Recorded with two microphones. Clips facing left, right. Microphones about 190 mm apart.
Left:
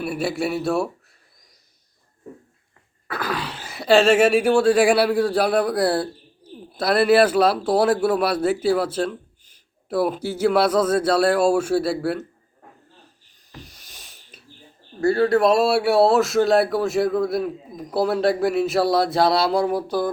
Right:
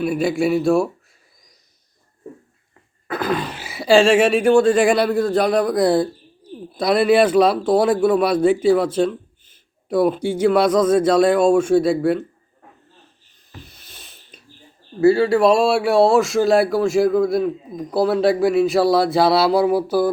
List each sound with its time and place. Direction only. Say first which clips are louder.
0.0 s a man's voice: right 5 dB; 5° left (ahead or behind)
3.1 s groan: right 5 dB; 20° right (ahead or behind)
3.5 s a man's voice: right 2 dB; 5° right (ahead or behind)
14.1 s a sound: right 2 dB; 5° left (ahead or behind)
15.0 s a man's voice: right 3 dB; centre (ahead or behind)